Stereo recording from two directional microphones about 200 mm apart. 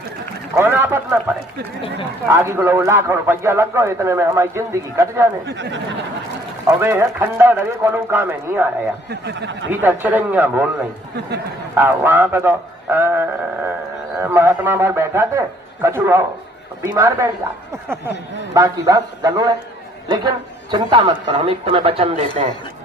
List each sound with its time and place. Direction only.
0.5 s a man's voice: 10° right (ahead or behind)
5.5 s speech: 65° right (ahead or behind)
6.7 s a man's voice: 10° right (ahead or behind)
9.0 s speech: 60° right (ahead or behind)
9.8 s a man's voice: 10° right (ahead or behind)
11.7 s a man's voice: 10° right (ahead or behind); by 22.4 s 35° right (ahead or behind)